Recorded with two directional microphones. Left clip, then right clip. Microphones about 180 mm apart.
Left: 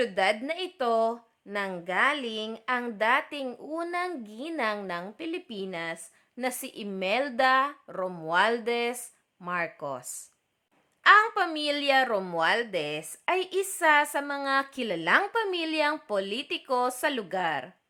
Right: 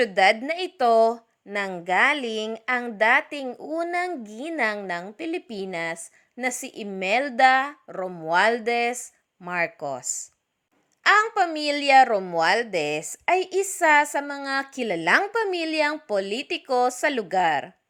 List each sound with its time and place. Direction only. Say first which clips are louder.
0.0 s a woman's voice: right 7 dB; 25° right (ahead or behind)